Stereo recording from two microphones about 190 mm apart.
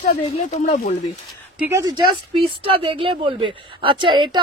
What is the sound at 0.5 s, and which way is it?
Speech, 35° left (ahead or behind).